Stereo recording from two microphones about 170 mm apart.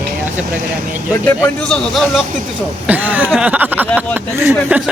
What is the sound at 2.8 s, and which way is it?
Speech, 10° right (ahead or behind).